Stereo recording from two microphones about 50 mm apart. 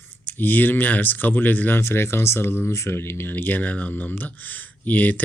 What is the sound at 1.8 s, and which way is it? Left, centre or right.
Speech, left.